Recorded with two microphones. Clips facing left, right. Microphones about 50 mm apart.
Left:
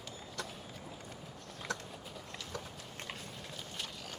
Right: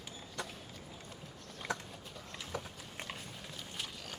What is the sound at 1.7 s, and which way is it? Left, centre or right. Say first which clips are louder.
Horse: right 1 dB; centre.